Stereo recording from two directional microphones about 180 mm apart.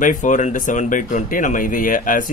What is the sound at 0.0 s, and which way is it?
Speech, 45° left (ahead or behind).